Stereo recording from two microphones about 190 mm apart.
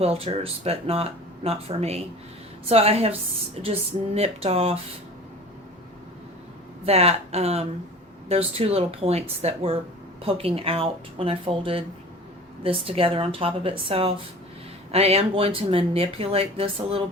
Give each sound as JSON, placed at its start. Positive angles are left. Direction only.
{"t": 0.0, "sound": "speech", "side_deg": -30}
{"t": 6.8, "sound": "speech", "side_deg": -30}